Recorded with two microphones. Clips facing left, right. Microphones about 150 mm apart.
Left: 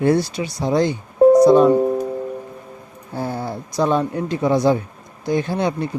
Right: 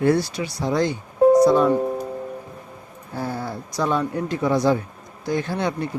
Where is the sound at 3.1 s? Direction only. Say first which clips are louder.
Left 3 dB; 25° left (ahead or behind).